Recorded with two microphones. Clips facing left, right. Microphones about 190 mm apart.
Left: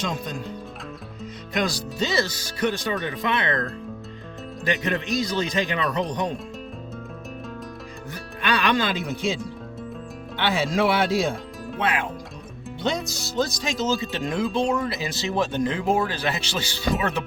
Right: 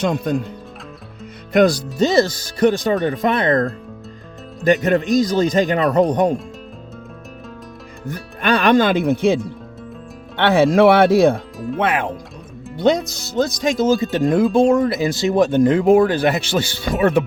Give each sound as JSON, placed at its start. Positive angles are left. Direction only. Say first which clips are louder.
{"t": 0.0, "sound": "speech", "louder": "right 10 dB", "side_deg": -60}
{"t": 1.5, "sound": "speech", "louder": "right 11 dB", "side_deg": -55}
{"t": 8.1, "sound": "speech", "louder": "right 7 dB", "side_deg": -50}
{"t": 13.3, "sound": "speech", "louder": "right 8 dB", "side_deg": -55}